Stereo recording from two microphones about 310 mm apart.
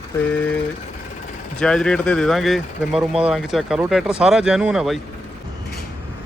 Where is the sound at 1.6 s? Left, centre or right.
Centre.